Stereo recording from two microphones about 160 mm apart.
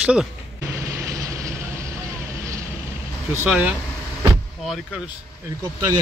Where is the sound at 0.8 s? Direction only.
20° right (ahead or behind).